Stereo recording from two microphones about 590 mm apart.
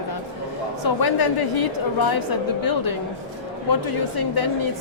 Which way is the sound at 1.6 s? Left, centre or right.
Left.